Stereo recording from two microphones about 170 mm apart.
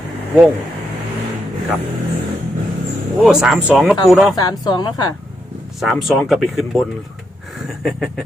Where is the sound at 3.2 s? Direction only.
5° right (ahead or behind).